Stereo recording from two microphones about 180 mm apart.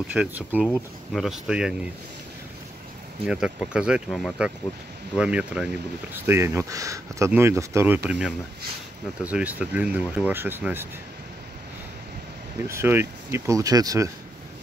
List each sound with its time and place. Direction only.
0.1 s speech: 5° right (ahead or behind)
3.3 s speech: 5° right (ahead or behind)
12.6 s speech: 15° right (ahead or behind)